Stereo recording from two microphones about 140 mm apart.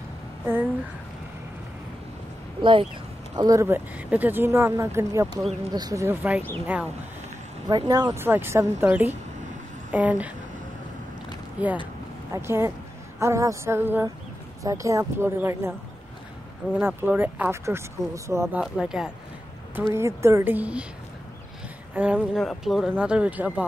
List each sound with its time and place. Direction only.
0.5 s speech: 15° right (ahead or behind)
2.6 s speech: 35° right (ahead or behind)
3.3 s speech: 25° right (ahead or behind)
5.4 s speech: 50° right (ahead or behind)
5.7 s speech: 30° right (ahead or behind)
6.0 s speech: 10° right (ahead or behind)
7.6 s speech: 30° right (ahead or behind); by 10.3 s 10° right (ahead or behind)
12.3 s speech: 15° right (ahead or behind)
16.8 s speech: 15° right (ahead or behind)
18.6 s speech: 5° right (ahead or behind)
19.9 s speech: 20° right (ahead or behind)
21.9 s speech: 10° right (ahead or behind)
22.3 s speech: centre (ahead or behind)